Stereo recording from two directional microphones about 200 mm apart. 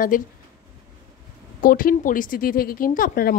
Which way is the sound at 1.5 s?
45° left (ahead or behind).